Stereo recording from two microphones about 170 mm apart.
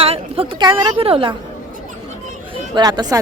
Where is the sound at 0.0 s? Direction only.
35° right (ahead or behind).